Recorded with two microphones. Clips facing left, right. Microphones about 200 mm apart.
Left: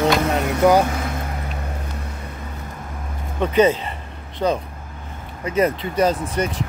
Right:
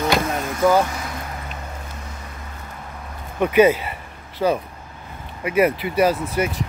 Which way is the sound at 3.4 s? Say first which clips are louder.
Right 1 dB; 10° right (ahead or behind).